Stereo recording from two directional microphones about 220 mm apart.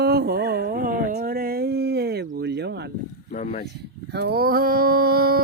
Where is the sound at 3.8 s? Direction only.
45° right (ahead or behind).